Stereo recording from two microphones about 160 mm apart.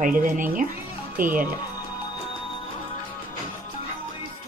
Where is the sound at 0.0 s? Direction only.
55° right (ahead or behind).